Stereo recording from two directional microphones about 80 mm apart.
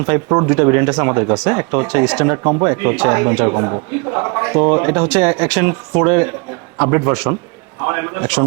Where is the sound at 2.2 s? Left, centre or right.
Right.